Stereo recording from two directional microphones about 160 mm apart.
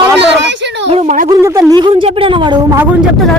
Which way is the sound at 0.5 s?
90° right.